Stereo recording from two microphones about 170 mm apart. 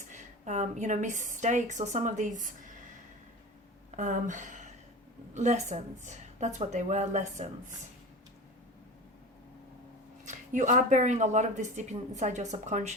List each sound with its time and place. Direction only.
0.1 s speech: 45° right (ahead or behind)
3.9 s speech: 45° right (ahead or behind)
10.2 s speech: 45° right (ahead or behind)